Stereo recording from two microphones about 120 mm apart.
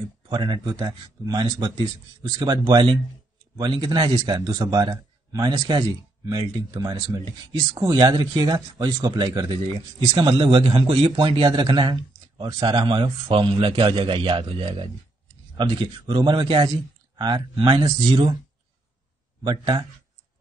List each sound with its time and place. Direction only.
0.3 s a man's voice: 40° right (ahead or behind)
19.4 s speech: 40° right (ahead or behind)